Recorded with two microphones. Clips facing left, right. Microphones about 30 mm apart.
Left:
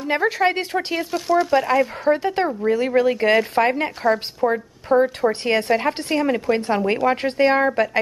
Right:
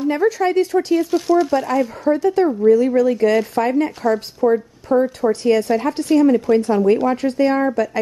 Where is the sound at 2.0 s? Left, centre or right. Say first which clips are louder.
Right 3 dB; left.